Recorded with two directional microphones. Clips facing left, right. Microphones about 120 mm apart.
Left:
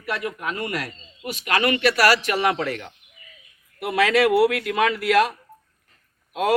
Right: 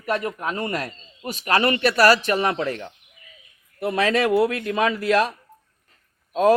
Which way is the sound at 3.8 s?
30° right (ahead or behind).